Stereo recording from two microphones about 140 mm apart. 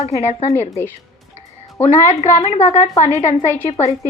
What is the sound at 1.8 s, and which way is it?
Speech, 45° left (ahead or behind).